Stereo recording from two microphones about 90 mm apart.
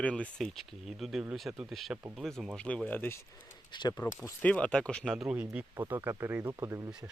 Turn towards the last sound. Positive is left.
turn(degrees=-35)  # may be behind; listen again after turning